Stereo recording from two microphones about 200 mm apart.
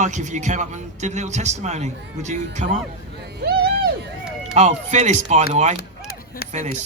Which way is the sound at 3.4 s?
55° right (ahead or behind).